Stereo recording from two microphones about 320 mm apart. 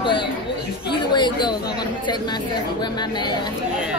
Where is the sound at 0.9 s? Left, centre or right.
Centre.